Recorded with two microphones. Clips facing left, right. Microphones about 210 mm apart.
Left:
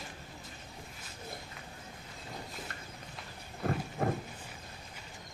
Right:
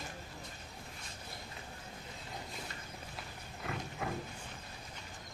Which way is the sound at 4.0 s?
45° left (ahead or behind).